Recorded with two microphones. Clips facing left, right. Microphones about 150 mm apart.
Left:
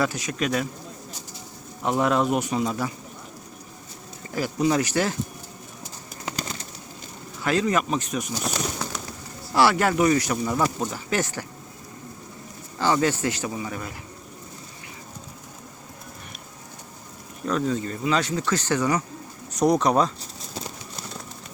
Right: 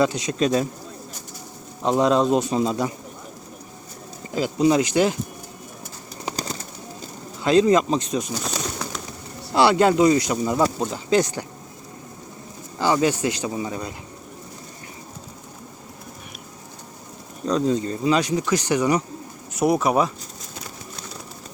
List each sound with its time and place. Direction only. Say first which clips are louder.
0.0 s speech: right 5 dB; 20° right (ahead or behind)
1.8 s speech: right 4 dB; 20° right (ahead or behind)
4.3 s a man's voice: right 4 dB; 20° right (ahead or behind)
7.4 s speech: right 6 dB; 20° right (ahead or behind)
9.5 s speech: right 3 dB; 20° right (ahead or behind)
12.8 s a man's voice: right 2 dB; 15° right (ahead or behind)
17.4 s speech: right 4 dB; 20° right (ahead or behind)
18.2 s a man's voice: right 3 dB; 15° right (ahead or behind)